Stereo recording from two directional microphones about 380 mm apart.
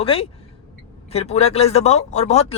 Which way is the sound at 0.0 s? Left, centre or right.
Centre.